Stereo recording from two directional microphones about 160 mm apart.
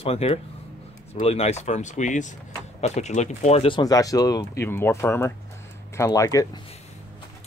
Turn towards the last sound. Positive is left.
turn(degrees=20)  # may be behind; listen again after turning